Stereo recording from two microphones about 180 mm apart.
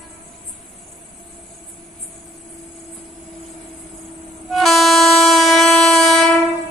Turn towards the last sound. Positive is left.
turn(degrees=0)  # may be behind; listen again after turning